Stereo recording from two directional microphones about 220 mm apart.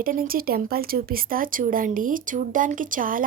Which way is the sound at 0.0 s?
40° right (ahead or behind).